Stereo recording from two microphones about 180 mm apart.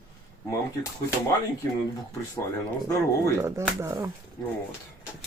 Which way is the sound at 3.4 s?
15° right (ahead or behind).